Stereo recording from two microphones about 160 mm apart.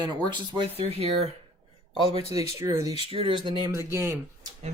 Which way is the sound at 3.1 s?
35° right (ahead or behind).